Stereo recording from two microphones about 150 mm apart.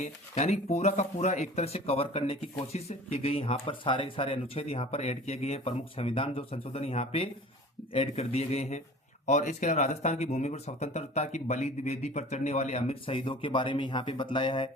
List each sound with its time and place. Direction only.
0.0 s speech: 50° left (ahead or behind); by 14.7 s 35° left (ahead or behind)